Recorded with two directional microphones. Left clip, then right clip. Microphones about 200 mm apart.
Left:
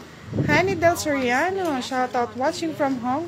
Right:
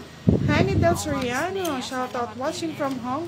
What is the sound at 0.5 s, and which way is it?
A woman's voice, 30° left (ahead or behind).